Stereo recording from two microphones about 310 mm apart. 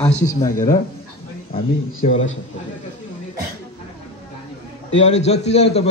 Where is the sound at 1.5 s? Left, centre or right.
Left.